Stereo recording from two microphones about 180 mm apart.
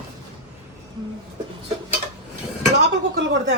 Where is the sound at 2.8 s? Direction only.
75° right (ahead or behind).